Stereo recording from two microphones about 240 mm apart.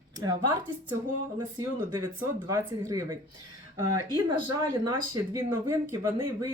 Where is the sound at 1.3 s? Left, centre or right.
Centre.